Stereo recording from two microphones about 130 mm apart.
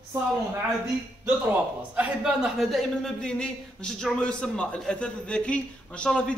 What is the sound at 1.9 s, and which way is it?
A man's voice, 10° right (ahead or behind).